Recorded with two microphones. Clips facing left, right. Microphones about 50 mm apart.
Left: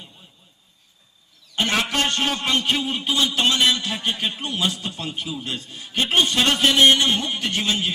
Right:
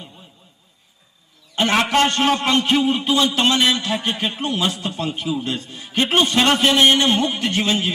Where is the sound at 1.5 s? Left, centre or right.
Right.